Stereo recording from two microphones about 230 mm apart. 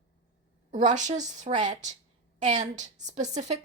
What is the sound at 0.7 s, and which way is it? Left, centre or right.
Speech, right.